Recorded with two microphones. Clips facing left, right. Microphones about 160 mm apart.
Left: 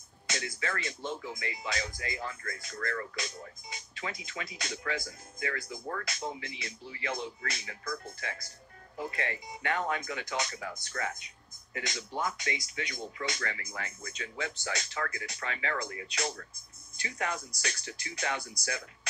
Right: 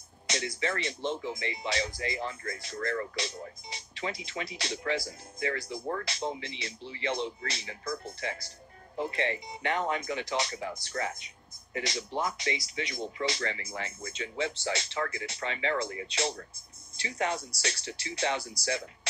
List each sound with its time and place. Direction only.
0.3 s speech: 25° right (ahead or behind)